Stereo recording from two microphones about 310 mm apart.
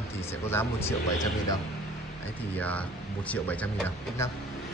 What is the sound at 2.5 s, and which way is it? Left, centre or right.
Speech, centre.